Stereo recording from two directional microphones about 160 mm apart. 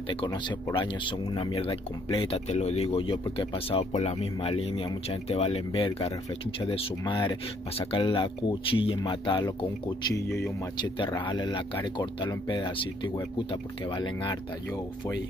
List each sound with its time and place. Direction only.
0.1 s speech: 30° left (ahead or behind)
10.8 s speech: 30° left (ahead or behind)